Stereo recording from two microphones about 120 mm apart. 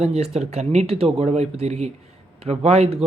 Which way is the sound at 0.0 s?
60° right (ahead or behind).